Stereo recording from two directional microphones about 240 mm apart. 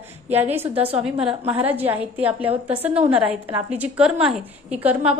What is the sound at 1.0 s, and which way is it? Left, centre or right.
A woman's voice, centre.